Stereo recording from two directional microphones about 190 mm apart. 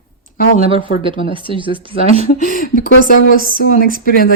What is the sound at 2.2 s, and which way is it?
Speech, 45° left (ahead or behind).